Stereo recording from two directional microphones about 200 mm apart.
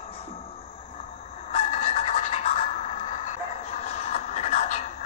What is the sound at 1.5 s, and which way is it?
Fowl, 30° left (ahead or behind).